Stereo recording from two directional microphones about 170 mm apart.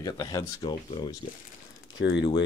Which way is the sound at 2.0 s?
85° left.